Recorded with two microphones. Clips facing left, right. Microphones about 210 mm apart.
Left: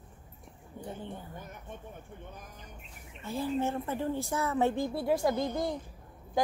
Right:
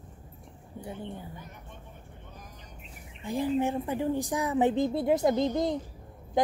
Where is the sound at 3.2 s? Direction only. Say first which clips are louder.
Right 4 dB; 15° right (ahead or behind).